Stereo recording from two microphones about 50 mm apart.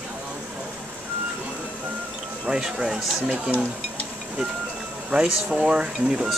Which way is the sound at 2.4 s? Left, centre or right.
Centre.